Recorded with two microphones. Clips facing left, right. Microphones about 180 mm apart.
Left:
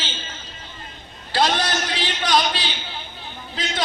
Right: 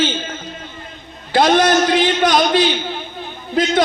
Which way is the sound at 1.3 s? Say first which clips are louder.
Right 9 dB; 50° right (ahead or behind).